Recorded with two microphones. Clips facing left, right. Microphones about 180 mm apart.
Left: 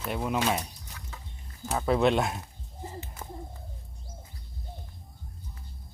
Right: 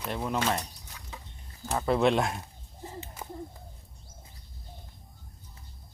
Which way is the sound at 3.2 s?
10° right (ahead or behind).